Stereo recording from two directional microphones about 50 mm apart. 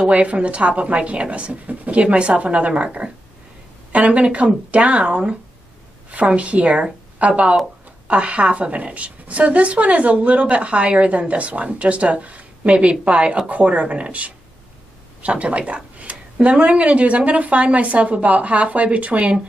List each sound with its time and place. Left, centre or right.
0.0 s speech: right